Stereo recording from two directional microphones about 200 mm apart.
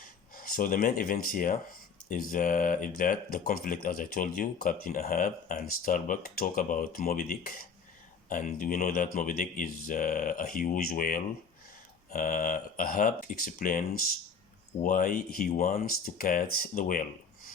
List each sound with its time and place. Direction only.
0.3 s speech: 45° left (ahead or behind)